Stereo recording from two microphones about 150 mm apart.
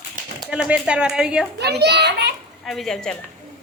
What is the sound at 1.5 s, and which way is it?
Speech, 90° right.